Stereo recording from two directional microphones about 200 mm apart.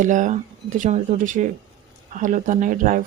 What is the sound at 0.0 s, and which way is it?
Speech, 40° right (ahead or behind).